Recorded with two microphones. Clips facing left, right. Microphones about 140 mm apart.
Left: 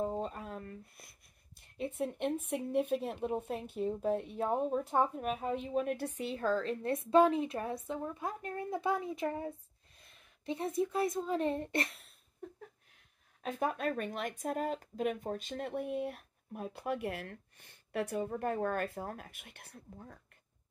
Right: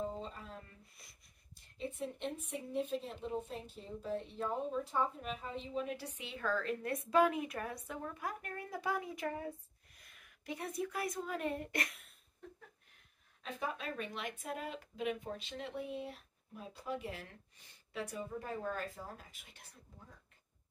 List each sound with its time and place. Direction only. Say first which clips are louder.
0.0 s a sound: left 6 dB; 55° left (ahead or behind)
1.8 s a woman's voice: left 6 dB; 60° left (ahead or behind); by 12.0 s 30° left (ahead or behind)
13.4 s speech: left 7 dB; 50° left (ahead or behind)